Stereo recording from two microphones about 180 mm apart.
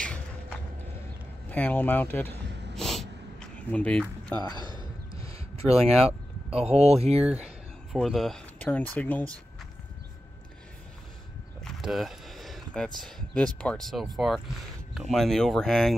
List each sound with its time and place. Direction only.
0.0 s a sound: 5° left (ahead or behind)
1.5 s speech: 10° left (ahead or behind)
2.7 s snort: centre (ahead or behind)
5.7 s speech: 35° right (ahead or behind)
7.4 s speech: centre (ahead or behind)
11.6 s speech: centre (ahead or behind)